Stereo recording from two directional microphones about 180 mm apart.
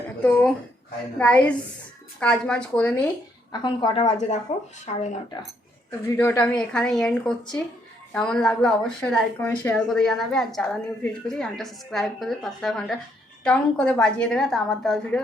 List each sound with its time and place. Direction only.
0.2 s a woman's voice: 10° left (ahead or behind)
3.5 s a woman's voice: 25° left (ahead or behind)
4.0 s speech: 40° left (ahead or behind)
6.1 s a woman's voice: 10° left (ahead or behind)